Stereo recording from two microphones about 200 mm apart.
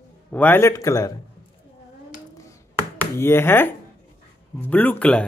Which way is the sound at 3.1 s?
10° left (ahead or behind).